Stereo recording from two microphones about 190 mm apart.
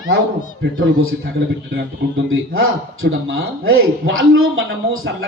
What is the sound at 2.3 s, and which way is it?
Speech, 90° right.